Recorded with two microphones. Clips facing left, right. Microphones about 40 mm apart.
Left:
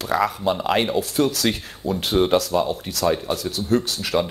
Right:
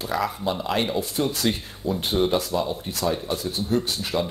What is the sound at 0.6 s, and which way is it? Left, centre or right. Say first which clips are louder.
Speech: left 4 dB; left.